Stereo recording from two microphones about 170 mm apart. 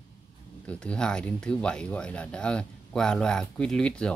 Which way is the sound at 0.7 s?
5° left (ahead or behind).